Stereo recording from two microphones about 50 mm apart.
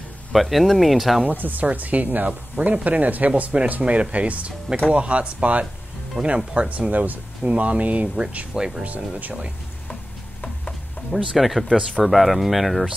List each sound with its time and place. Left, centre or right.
0.3 s speech: centre
1.3 s speech: right
8.5 s speech: centre
8.8 s speech: right
11.3 s speech: centre